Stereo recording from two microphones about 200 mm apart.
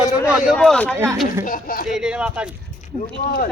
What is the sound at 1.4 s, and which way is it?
Speech, 45° left (ahead or behind).